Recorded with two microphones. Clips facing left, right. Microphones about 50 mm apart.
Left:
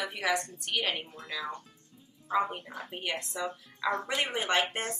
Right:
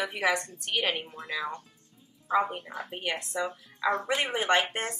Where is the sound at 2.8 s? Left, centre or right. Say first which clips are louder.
Right 1 dB; centre.